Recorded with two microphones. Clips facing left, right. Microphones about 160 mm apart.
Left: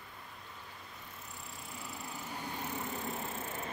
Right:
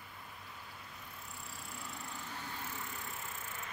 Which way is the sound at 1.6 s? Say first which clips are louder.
Left 3 dB; centre (ahead or behind).